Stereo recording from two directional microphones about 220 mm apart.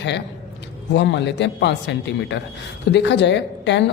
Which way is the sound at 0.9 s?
55° left (ahead or behind).